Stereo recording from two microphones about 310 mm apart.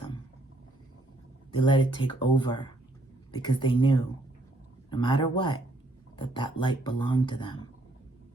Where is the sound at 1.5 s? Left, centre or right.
Centre.